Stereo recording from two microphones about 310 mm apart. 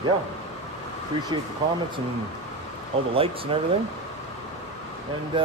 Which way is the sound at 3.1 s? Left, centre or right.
Centre.